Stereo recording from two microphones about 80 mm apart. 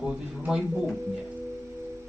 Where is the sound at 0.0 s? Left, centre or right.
Centre.